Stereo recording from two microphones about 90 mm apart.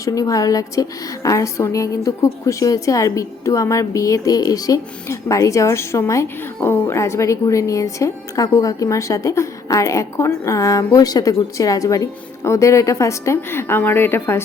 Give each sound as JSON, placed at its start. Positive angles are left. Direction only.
{"t": 0.0, "sound": "a woman's voice", "side_deg": 40}